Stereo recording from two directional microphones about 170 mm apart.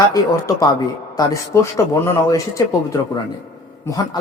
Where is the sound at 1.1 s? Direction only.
20° left (ahead or behind).